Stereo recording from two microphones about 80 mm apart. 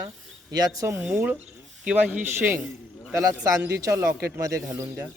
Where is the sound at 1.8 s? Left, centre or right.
Centre.